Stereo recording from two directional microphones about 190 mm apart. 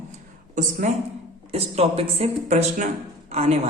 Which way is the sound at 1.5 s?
35° right (ahead or behind).